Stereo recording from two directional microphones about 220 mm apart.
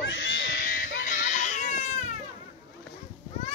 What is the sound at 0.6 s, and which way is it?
Baby cry, 40° left (ahead or behind).